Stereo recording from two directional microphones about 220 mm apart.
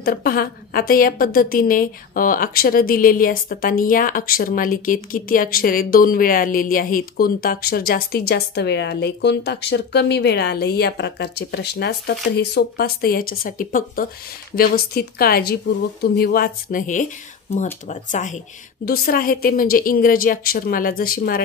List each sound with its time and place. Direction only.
0.0 s a woman's voice: 45° left (ahead or behind)